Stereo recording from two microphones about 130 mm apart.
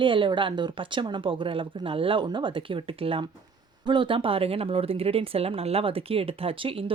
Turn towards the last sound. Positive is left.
turn(degrees=-45)  # may be behind; listen again after turning